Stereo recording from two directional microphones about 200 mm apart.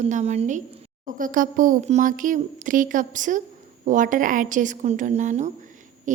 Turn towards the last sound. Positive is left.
turn(degrees=-40)  # may be behind; listen again after turning